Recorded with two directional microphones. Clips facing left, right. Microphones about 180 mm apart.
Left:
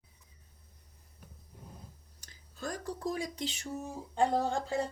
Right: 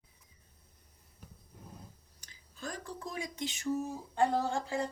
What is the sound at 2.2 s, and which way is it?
Speech, 45° left (ahead or behind).